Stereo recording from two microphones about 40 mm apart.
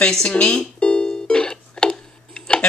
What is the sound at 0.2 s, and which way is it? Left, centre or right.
Music, left.